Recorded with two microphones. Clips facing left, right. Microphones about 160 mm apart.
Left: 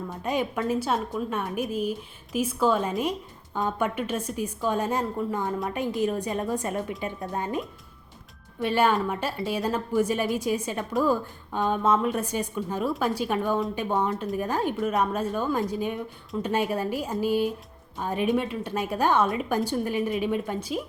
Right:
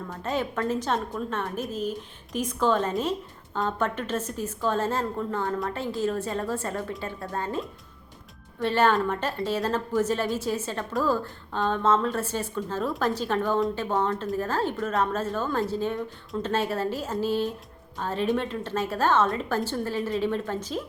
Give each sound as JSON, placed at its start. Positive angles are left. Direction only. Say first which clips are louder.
{"t": 0.1, "sound": "a woman's voice", "louder": "left 1 dB", "side_deg": 15}